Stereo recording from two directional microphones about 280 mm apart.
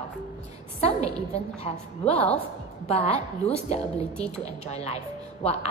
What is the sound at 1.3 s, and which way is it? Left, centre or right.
Speech, left.